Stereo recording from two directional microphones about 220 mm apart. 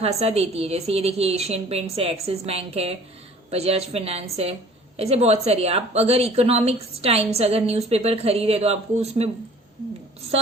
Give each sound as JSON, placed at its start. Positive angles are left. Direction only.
{"t": 0.0, "sound": "a woman's voice", "side_deg": -30}